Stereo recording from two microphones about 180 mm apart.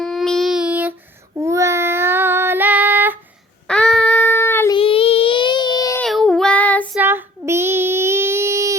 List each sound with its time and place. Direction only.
0.0 s child singing: centre (ahead or behind)
3.7 s child singing: 5° left (ahead or behind)
4.7 s a sound: 30° left (ahead or behind)
6.0 s child singing: centre (ahead or behind)
6.9 s child singing: 10° right (ahead or behind)